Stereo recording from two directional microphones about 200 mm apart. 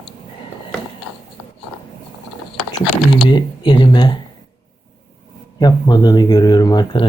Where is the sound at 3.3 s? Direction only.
25° left (ahead or behind).